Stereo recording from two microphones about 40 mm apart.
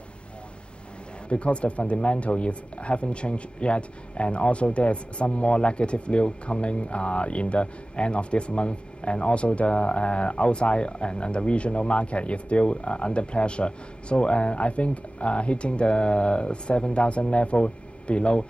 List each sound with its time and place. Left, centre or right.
1.3 s speech: left